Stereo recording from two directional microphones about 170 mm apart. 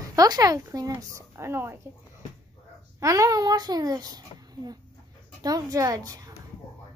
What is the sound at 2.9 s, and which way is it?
A child's voice, 20° right (ahead or behind).